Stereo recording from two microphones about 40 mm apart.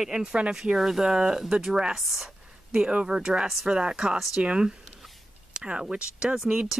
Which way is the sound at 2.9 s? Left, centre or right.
Centre.